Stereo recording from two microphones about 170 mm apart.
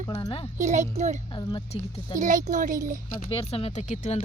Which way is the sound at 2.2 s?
50° right (ahead or behind).